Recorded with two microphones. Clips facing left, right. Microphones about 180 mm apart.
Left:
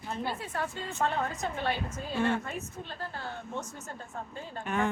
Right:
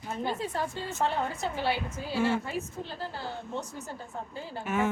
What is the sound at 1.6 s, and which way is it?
Speech, 10° right (ahead or behind).